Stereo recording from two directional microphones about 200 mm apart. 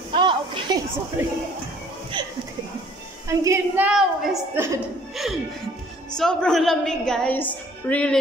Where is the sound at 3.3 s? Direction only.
10° right (ahead or behind).